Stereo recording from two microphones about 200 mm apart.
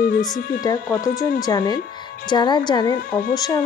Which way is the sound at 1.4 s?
20° left (ahead or behind).